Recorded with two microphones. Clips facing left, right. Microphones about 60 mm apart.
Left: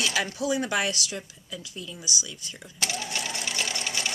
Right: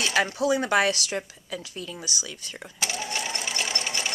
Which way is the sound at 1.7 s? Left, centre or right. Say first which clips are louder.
Right 3 dB; right.